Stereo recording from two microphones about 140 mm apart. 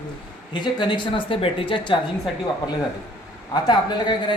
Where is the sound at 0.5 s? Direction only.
35° left (ahead or behind).